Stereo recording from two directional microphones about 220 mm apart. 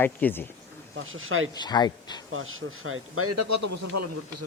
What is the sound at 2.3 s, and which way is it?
A man's voice, 65° right (ahead or behind).